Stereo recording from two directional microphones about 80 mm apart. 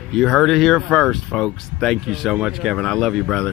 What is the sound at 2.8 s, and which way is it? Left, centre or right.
Speech, centre.